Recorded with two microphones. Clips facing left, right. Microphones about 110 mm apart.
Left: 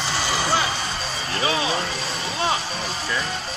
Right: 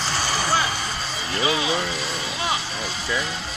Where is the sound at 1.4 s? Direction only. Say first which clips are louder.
Even; 35° left (ahead or behind).